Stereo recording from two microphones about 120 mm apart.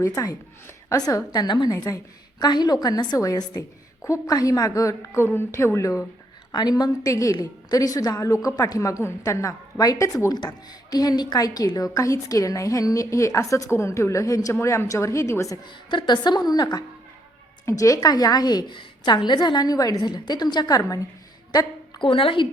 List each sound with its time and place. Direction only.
0.0 s a woman's voice: 30° left (ahead or behind)
6.5 s a woman's voice: 35° left (ahead or behind)
15.6 s a woman's voice: 40° left (ahead or behind)
21.5 s a sound: 30° left (ahead or behind)
22.0 s a woman's voice: 45° left (ahead or behind)